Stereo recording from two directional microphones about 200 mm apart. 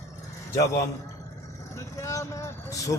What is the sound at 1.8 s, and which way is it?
Vehicle, 15° left (ahead or behind).